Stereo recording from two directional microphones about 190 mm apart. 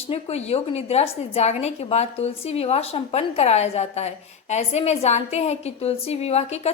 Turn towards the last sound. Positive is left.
turn(degrees=35)  # may be behind; listen again after turning